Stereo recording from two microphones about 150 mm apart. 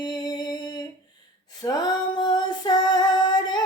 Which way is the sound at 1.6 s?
25° left (ahead or behind).